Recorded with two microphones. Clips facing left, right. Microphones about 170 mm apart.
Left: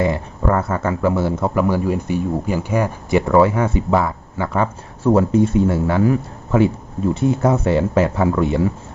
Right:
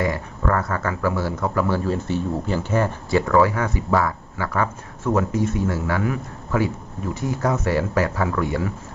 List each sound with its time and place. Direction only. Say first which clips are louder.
0.0 s speech: left 4 dB; 25° left (ahead or behind)